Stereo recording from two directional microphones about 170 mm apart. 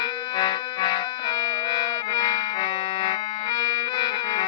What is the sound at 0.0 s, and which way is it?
Music, 25° left (ahead or behind).